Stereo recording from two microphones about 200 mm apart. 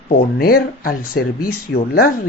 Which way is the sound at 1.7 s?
65° left (ahead or behind).